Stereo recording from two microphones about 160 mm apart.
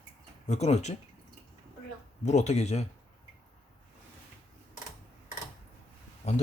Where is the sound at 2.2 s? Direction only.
45° left (ahead or behind).